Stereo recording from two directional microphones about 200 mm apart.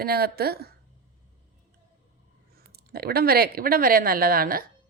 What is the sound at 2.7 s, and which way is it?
Speech, 50° right (ahead or behind).